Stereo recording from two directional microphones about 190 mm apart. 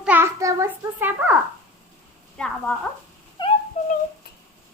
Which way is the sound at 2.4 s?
5° left (ahead or behind).